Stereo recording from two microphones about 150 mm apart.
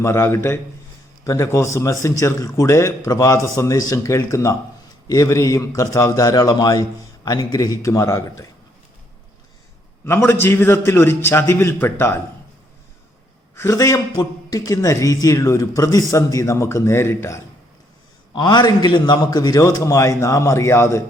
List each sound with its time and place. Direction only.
0.0 s a man's voice: 15° left (ahead or behind)
10.1 s a man's voice: 15° left (ahead or behind)
13.6 s a man's voice: 20° left (ahead or behind)
18.3 s a man's voice: 30° left (ahead or behind)